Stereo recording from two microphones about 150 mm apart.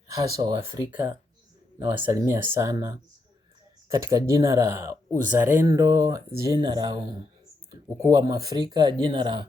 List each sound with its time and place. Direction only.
0.1 s speech: 25° right (ahead or behind)
2.1 s speech: 20° right (ahead or behind)